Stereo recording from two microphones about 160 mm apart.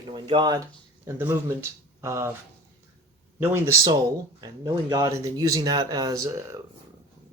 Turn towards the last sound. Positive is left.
turn(degrees=-20)  # may be behind; listen again after turning